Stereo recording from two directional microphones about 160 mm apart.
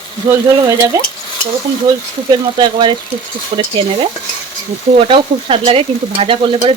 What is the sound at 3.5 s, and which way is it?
Stir, 30° right (ahead or behind).